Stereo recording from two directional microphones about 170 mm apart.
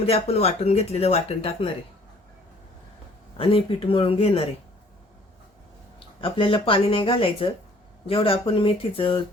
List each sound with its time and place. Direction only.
0.0 s speech: 35° left (ahead or behind)
3.3 s speech: 30° left (ahead or behind)
6.2 s speech: 30° left (ahead or behind)